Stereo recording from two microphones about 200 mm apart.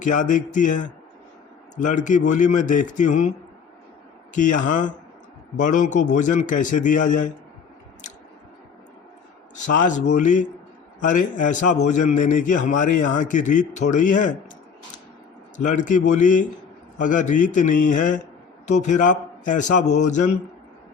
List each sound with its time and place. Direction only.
0.0 s a man's voice: 40° left (ahead or behind)
4.4 s a man's voice: 40° left (ahead or behind)
9.8 s a man's voice: 40° left (ahead or behind)
15.5 s a man's voice: 40° left (ahead or behind)